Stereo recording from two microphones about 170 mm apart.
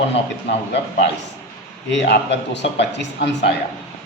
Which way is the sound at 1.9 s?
80° left.